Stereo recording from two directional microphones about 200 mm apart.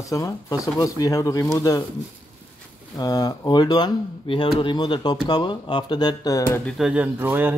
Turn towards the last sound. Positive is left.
turn(degrees=-10)  # may be behind; listen again after turning